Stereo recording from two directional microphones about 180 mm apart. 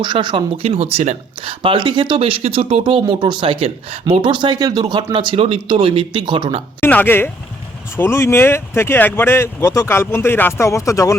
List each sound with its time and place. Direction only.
0.0 s speech: 25° right (ahead or behind)
6.8 s speech: 10° left (ahead or behind)